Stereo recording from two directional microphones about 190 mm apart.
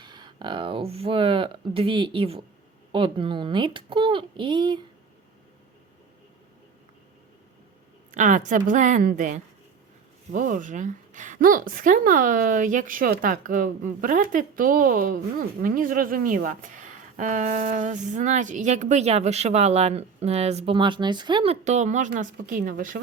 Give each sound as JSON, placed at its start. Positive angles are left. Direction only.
{"t": 0.0, "sound": "speech", "side_deg": -25}
{"t": 8.1, "sound": "a woman's voice", "side_deg": -40}